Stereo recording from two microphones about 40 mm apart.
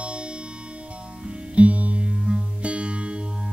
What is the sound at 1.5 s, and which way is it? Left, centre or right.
Music, right.